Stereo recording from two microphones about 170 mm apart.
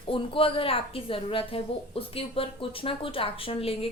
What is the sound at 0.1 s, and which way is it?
A woman's voice, 35° left (ahead or behind).